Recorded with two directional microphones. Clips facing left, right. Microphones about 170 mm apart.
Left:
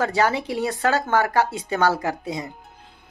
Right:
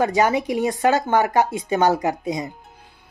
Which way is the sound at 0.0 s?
15° right (ahead or behind).